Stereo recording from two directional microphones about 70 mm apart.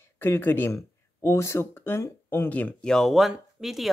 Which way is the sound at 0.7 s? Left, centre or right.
Left.